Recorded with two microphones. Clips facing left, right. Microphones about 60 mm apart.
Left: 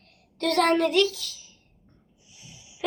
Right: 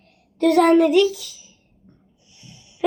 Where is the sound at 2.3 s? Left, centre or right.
Centre.